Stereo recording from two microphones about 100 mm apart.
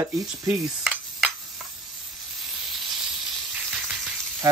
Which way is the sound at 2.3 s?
Centre (ahead or behind).